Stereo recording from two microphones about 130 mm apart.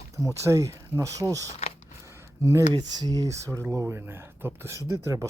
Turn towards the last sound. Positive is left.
turn(degrees=-25)  # may be behind; listen again after turning